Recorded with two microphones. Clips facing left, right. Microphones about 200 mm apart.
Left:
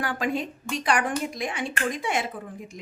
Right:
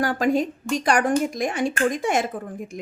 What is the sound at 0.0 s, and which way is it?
A woman's voice, 40° right (ahead or behind).